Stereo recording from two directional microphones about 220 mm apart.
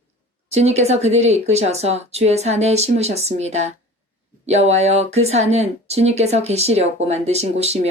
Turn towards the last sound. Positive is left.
turn(degrees=-30)  # may be behind; listen again after turning